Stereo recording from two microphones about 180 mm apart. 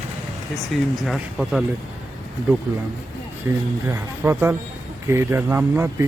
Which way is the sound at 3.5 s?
15° right (ahead or behind).